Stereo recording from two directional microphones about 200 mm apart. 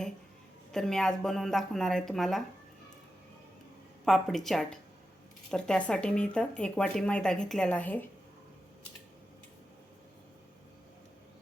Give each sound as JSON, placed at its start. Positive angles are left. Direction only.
{"t": 0.7, "sound": "speech", "side_deg": 0}
{"t": 4.0, "sound": "speech", "side_deg": 0}